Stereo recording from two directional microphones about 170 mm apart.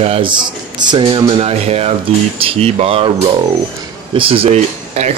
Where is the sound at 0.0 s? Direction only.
30° right (ahead or behind).